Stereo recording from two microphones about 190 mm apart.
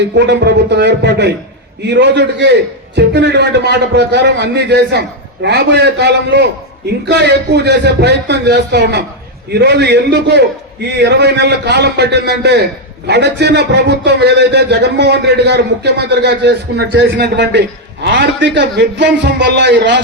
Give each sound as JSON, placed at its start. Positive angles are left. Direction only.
{"t": 0.1, "sound": "a man's voice", "side_deg": -65}